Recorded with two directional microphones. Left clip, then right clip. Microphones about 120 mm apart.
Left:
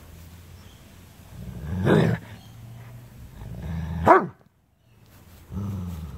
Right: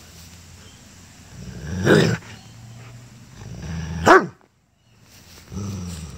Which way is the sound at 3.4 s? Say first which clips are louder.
Right 3 dB; 10° right (ahead or behind).